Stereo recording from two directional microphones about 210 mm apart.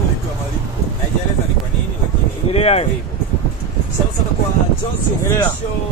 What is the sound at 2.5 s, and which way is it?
Speech, 30° left (ahead or behind).